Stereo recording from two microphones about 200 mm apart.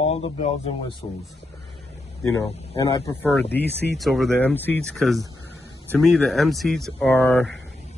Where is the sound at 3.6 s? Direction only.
55° left (ahead or behind).